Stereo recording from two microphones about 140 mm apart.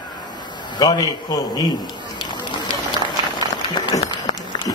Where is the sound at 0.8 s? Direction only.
30° left (ahead or behind).